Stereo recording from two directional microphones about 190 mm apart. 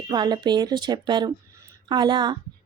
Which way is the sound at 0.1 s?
20° right (ahead or behind).